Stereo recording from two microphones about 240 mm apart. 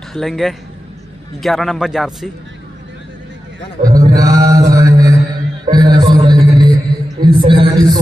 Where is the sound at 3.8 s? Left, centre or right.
Centre.